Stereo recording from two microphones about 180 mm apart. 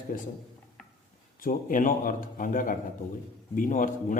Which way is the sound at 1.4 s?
50° left (ahead or behind).